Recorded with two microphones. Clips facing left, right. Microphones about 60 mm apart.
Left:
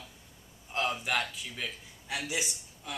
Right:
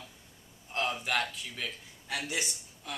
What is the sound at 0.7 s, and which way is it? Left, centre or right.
A man's voice, centre.